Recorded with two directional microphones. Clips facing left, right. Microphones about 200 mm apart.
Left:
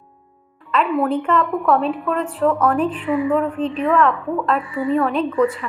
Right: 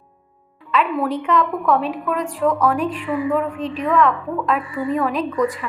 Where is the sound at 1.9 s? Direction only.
15° right (ahead or behind).